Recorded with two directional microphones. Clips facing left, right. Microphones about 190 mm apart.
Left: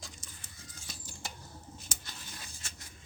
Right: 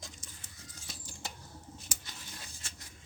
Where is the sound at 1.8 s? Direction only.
15° right (ahead or behind).